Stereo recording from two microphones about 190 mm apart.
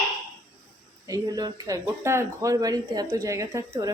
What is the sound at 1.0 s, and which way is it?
Speech, 20° right (ahead or behind).